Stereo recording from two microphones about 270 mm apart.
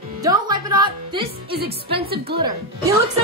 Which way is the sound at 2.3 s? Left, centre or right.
Right.